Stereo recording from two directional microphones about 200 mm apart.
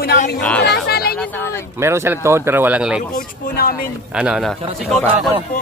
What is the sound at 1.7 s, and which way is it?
Speech, 15° right (ahead or behind).